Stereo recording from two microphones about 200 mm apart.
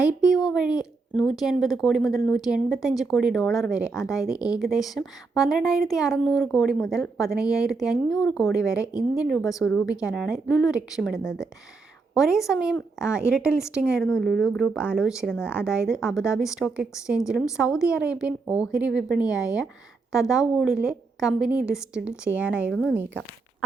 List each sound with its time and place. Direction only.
0.3 s a woman's voice: 5° right (ahead or behind)
9.4 s a woman's voice: 15° left (ahead or behind)
9.8 s a woman's voice: 5° right (ahead or behind)
22.7 s a woman's voice: 5° left (ahead or behind)